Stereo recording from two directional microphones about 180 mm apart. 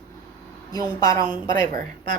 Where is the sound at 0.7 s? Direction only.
20° left (ahead or behind).